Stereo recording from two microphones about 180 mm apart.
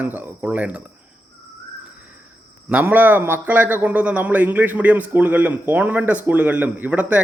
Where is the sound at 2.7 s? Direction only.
10° right (ahead or behind).